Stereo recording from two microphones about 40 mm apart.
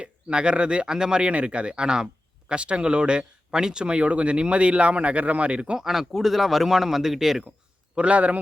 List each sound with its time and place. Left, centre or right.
0.0 s speech: right
0.9 s speech: centre
5.8 s speech: centre
7.9 s a man's voice: right